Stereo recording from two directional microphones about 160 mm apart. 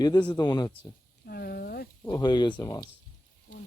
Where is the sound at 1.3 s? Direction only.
75° left (ahead or behind).